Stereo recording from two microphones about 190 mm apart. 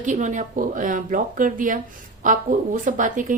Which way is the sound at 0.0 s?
40° right (ahead or behind).